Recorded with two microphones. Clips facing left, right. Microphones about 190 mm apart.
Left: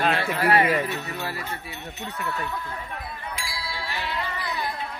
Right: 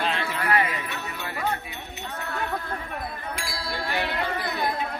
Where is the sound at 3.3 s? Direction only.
55° right (ahead or behind).